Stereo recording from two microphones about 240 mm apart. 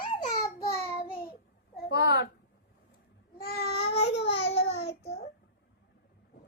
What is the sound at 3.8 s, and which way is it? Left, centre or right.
Baby cry, left.